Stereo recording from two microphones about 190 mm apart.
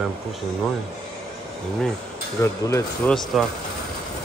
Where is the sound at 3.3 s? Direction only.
Centre (ahead or behind).